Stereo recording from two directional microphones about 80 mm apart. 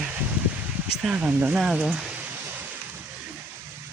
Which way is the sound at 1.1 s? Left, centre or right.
Centre.